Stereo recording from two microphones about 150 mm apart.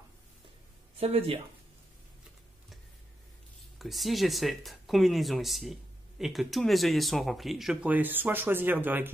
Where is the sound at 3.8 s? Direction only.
Centre (ahead or behind).